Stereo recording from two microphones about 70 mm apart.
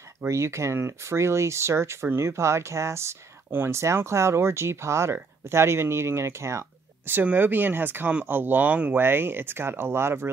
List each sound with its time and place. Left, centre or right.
0.3 s speech: right
7.1 s speech: right
9.0 s speech: right